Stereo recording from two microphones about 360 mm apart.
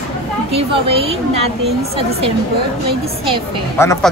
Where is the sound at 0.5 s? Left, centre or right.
Centre.